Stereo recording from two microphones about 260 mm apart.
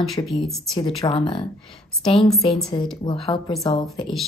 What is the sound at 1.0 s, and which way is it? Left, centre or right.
Speech, centre.